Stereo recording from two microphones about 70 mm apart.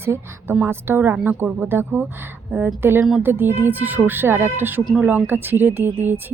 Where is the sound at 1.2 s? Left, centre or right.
Right.